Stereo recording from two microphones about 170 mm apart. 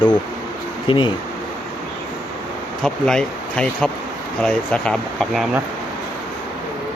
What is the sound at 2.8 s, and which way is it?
Speech, 5° left (ahead or behind).